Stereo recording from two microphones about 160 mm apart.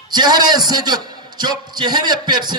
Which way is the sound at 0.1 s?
25° right (ahead or behind).